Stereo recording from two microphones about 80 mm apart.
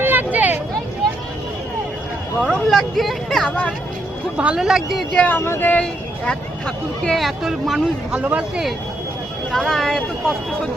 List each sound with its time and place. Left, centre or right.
0.0 s a sound: right
2.5 s speech: centre
3.5 s speech: centre
4.4 s speech: centre
5.1 s speech: centre
5.8 s speech: centre
8.1 s speech: centre
9.5 s speech: centre